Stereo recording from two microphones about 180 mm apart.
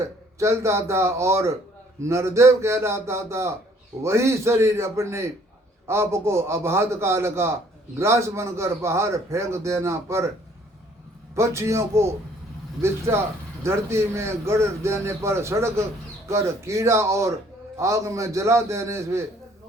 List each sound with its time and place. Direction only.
0.3 s a man's voice: 15° right (ahead or behind)
11.3 s a man's voice: 15° right (ahead or behind)
13.6 s a man's voice: 15° right (ahead or behind)